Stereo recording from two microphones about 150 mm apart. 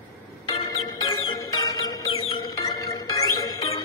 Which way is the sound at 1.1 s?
25° left (ahead or behind).